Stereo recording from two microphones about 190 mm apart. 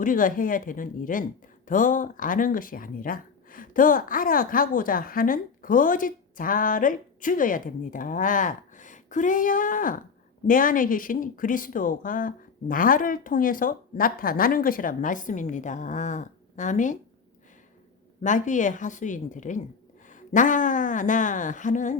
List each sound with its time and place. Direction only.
0.0 s speech: 45° left (ahead or behind)
18.2 s a woman's voice: 40° left (ahead or behind)